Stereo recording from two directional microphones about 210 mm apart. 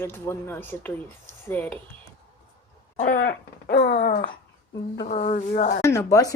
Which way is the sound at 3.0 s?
40° left (ahead or behind).